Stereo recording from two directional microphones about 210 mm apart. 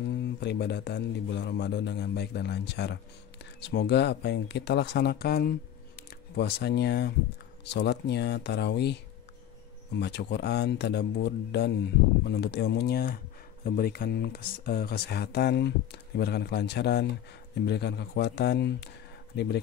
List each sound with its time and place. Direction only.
0.2 s speech: 55° left (ahead or behind)